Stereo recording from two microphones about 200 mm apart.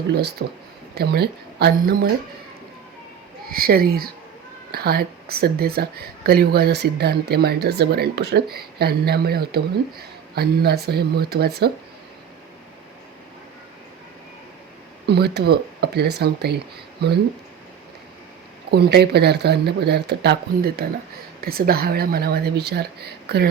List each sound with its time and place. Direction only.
0.1 s speech: 55° right (ahead or behind)
3.5 s speech: 50° right (ahead or behind)
15.0 s speech: 55° right (ahead or behind)
18.7 s speech: 55° right (ahead or behind)